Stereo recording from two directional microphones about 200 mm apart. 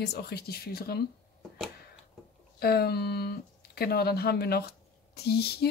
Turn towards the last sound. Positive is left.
turn(degrees=55)  # may be behind; listen again after turning